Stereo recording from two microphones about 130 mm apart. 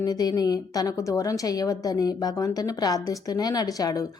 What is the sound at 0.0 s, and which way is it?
A woman's voice, 30° left (ahead or behind).